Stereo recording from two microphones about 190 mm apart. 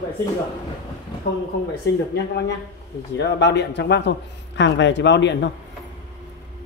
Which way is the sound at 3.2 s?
65° left (ahead or behind).